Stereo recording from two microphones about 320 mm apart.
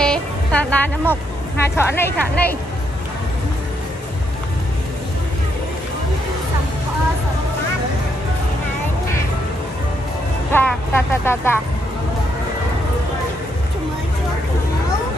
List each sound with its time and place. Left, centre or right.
0.0 s music: centre
1.8 s speech: centre
10.5 s speech: centre